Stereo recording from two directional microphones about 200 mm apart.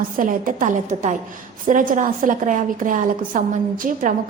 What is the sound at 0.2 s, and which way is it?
A woman's voice, 45° right (ahead or behind).